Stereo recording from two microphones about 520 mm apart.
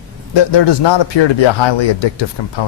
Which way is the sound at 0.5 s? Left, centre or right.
Left.